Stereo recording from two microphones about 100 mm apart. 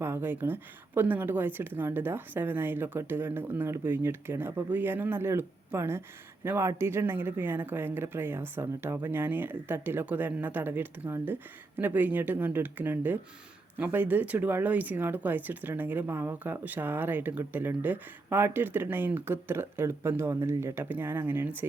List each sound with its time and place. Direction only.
0.0 s speech: 25° right (ahead or behind)